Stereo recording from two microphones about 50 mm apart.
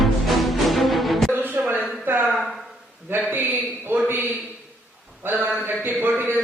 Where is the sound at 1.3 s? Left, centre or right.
Right.